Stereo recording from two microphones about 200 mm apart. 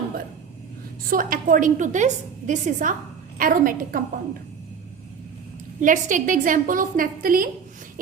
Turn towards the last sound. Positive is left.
turn(degrees=-45)  # may be behind; listen again after turning